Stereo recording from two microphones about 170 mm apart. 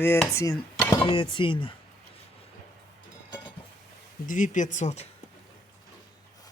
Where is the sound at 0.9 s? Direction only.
30° left (ahead or behind).